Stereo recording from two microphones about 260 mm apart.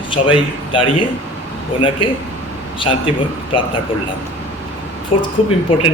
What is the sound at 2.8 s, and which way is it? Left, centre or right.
Speech, centre.